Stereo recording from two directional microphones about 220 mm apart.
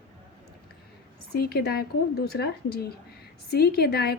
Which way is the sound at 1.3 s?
45° left (ahead or behind).